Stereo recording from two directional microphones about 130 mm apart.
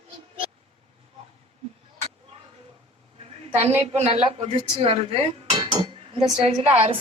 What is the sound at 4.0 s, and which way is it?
Dishes, 55° right (ahead or behind).